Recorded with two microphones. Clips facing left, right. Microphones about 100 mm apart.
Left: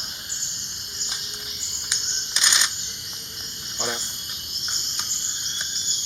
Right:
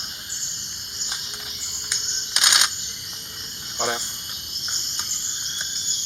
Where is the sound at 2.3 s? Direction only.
60° right (ahead or behind).